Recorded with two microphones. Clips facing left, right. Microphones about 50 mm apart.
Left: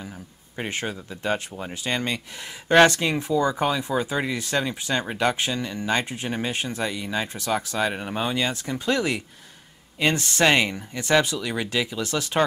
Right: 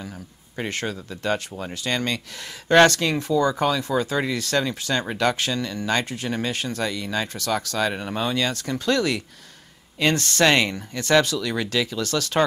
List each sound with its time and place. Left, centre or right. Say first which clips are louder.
0.6 s speech: right 1 dB; centre